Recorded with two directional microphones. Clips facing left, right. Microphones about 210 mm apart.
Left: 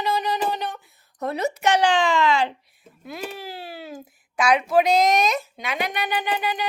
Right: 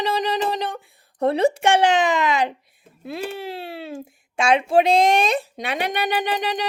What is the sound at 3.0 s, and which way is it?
Speech, 30° right (ahead or behind).